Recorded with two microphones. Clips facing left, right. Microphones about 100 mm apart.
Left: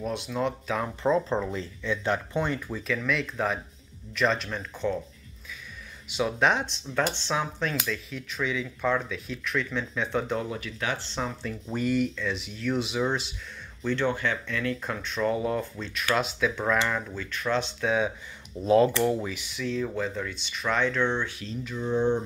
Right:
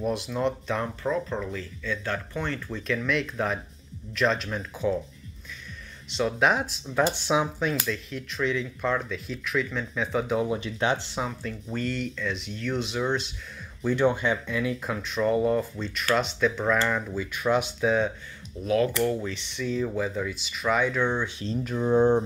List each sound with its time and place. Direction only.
0.0 s speech: centre (ahead or behind)
1.0 s speech: 25° left (ahead or behind)
2.7 s speech: centre (ahead or behind)
6.0 s speech: 5° left (ahead or behind)
10.4 s speech: 20° right (ahead or behind)
11.1 s speech: 5° right (ahead or behind)
13.8 s speech: 15° right (ahead or behind); by 16.7 s centre (ahead or behind)
16.9 s speech: 10° right (ahead or behind)
18.6 s speech: 30° left (ahead or behind); by 21.3 s 10° right (ahead or behind)
21.6 s speech: 50° right (ahead or behind)